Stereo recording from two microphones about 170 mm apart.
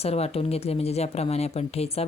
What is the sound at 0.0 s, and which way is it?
A woman's voice, 35° left (ahead or behind).